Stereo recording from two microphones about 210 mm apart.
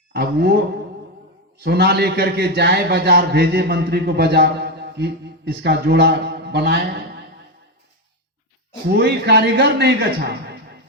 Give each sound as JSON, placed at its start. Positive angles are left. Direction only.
{"t": 0.1, "sound": "speech", "side_deg": -50}
{"t": 1.6, "sound": "a man's voice", "side_deg": -50}
{"t": 8.9, "sound": "a man's voice", "side_deg": -50}